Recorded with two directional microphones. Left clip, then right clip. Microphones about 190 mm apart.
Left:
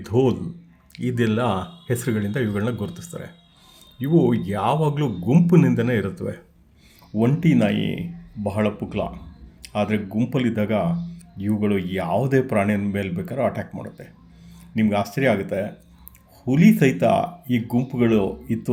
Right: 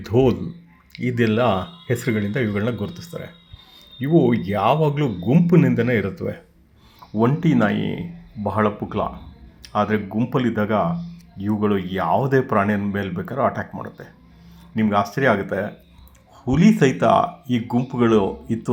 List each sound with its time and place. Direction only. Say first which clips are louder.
0.0 s speech: right 2 dB; centre (ahead or behind)
7.8 s speech: even; 25° right (ahead or behind)
8.4 s speech: right 3 dB; 10° left (ahead or behind)